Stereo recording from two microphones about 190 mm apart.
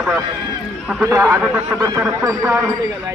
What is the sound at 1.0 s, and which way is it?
A man's voice, 15° right (ahead or behind).